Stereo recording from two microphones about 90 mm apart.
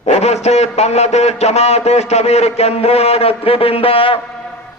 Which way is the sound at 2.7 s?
90° left.